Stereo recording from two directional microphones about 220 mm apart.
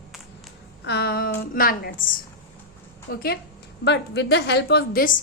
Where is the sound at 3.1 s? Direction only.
45° left (ahead or behind).